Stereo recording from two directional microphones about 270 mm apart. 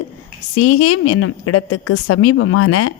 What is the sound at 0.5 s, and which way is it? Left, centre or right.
A woman's voice, left.